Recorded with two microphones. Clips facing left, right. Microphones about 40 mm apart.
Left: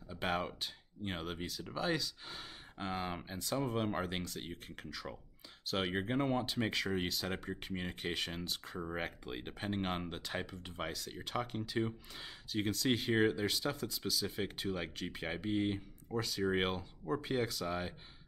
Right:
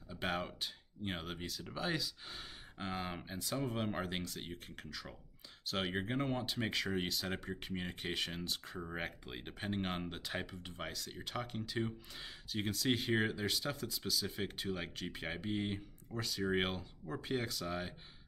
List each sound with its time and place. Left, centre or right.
0.1 s speech: centre